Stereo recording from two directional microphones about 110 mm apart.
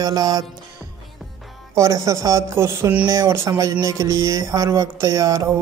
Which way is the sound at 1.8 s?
30° right (ahead or behind).